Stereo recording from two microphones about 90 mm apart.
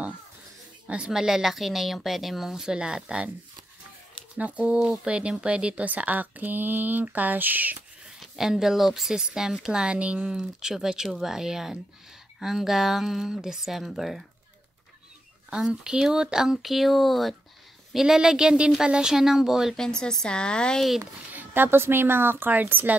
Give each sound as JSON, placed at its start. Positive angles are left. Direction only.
{"t": 0.8, "sound": "speech", "side_deg": -10}
{"t": 4.4, "sound": "speech", "side_deg": -15}
{"t": 8.2, "sound": "speech", "side_deg": -5}
{"t": 15.5, "sound": "speech", "side_deg": -5}
{"t": 19.8, "sound": "speech", "side_deg": 5}
{"t": 21.0, "sound": "speech", "side_deg": -20}